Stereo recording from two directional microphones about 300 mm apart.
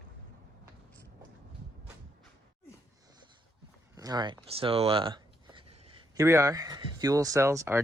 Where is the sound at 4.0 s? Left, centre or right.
Centre.